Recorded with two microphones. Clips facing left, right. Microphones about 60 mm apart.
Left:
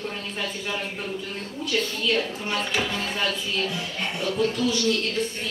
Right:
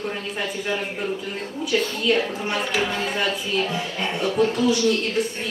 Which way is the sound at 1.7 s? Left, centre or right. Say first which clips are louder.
Right 4 dB; centre.